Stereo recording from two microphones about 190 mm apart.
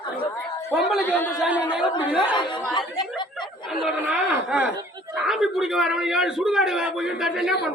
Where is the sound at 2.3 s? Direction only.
25° left (ahead or behind).